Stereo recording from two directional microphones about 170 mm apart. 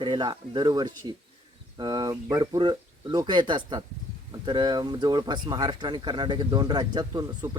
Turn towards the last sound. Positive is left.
turn(degrees=-25)  # may be behind; listen again after turning